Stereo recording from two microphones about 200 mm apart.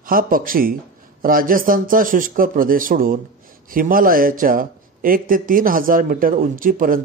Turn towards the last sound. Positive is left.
turn(degrees=-45)  # may be behind; listen again after turning